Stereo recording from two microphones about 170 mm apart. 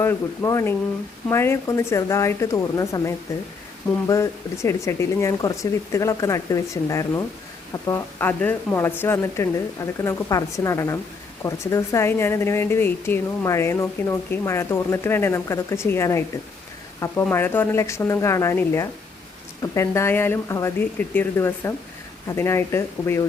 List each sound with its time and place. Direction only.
0.0 s a woman's voice: 15° left (ahead or behind)
4.0 s a woman's voice: 20° left (ahead or behind)